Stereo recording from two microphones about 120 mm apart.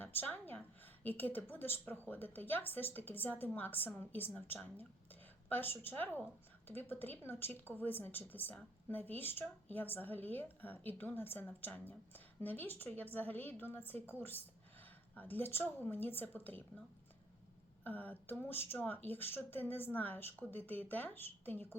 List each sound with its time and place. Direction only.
0.0 s a woman's voice: 15° left (ahead or behind)
17.8 s a woman's voice: 15° left (ahead or behind)